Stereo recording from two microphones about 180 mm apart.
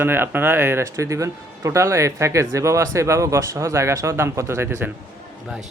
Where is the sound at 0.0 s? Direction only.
10° right (ahead or behind).